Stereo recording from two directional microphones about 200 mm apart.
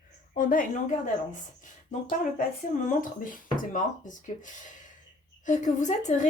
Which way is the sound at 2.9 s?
40° left (ahead or behind).